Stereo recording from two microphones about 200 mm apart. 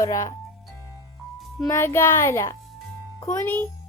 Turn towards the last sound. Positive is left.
turn(degrees=10)  # may be behind; listen again after turning